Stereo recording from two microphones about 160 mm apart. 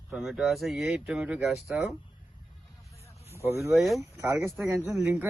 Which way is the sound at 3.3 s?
15° right (ahead or behind).